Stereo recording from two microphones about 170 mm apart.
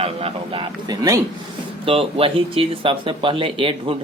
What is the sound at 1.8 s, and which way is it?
Speech, 30° right (ahead or behind).